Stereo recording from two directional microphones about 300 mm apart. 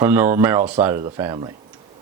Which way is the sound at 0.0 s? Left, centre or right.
Centre.